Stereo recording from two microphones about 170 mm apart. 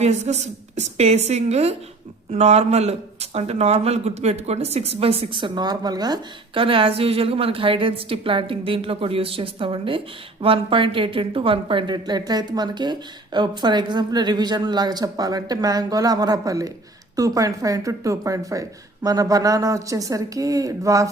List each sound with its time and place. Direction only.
0.0 s speech: 40° right (ahead or behind); by 21.1 s 20° right (ahead or behind)